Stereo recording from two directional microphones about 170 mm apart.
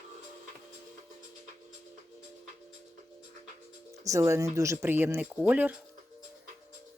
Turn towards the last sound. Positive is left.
turn(degrees=-10)  # may be behind; listen again after turning